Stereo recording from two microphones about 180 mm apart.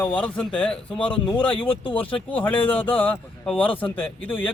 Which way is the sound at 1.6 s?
30° left (ahead or behind).